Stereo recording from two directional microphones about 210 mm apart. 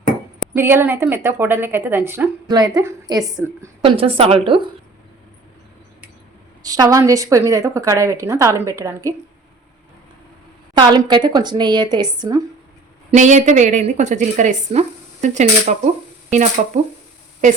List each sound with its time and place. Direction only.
0.5 s speech: 10° right (ahead or behind)
6.6 s speech: 15° right (ahead or behind)
10.8 s speech: 20° right (ahead or behind)
13.1 s a woman's voice: 35° right (ahead or behind)